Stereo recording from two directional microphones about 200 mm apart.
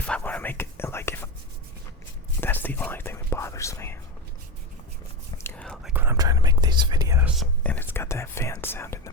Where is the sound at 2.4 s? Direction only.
10° left (ahead or behind).